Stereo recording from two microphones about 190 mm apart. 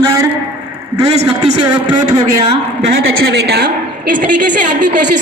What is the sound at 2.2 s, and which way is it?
Speech, 30° right (ahead or behind).